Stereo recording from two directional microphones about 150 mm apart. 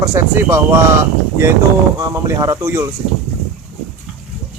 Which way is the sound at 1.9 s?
20° right (ahead or behind).